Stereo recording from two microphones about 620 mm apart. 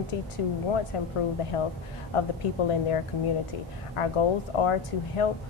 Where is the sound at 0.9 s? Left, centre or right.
Left.